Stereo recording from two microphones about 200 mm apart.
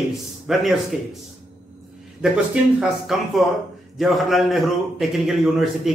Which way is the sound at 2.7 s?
Centre (ahead or behind).